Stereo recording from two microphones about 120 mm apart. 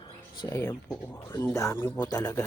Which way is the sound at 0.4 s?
30° left (ahead or behind).